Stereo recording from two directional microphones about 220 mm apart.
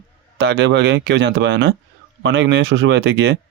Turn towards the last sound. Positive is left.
turn(degrees=-55)  # may be behind; listen again after turning